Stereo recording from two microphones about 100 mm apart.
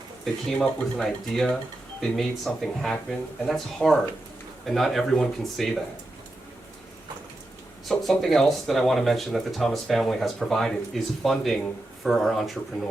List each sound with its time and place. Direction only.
0.6 s speech: 5° left (ahead or behind)
7.9 s speech: centre (ahead or behind)